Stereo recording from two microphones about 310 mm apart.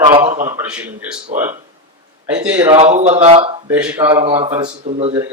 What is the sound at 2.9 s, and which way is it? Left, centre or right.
Speech, right.